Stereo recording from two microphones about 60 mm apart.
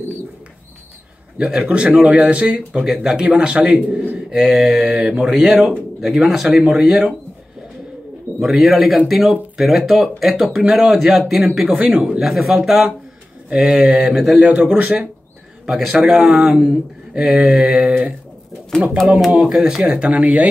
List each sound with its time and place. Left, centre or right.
1.4 s speech: centre
8.4 s speech: centre
11.7 s speech: centre
12.2 s speech: centre
13.9 s speech: centre
14.5 s speech: right
15.6 s a man's voice: centre; by 20.2 s right